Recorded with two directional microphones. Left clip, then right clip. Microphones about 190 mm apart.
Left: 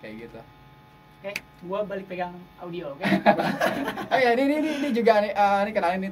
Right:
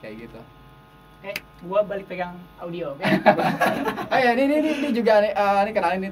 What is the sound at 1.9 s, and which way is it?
Speech, 15° right (ahead or behind).